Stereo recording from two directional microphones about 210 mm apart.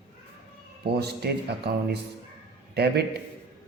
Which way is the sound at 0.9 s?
50° right (ahead or behind).